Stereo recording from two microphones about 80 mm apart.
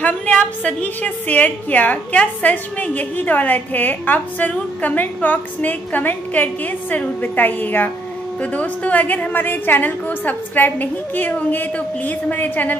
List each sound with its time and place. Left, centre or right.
0.0 s a woman's voice: centre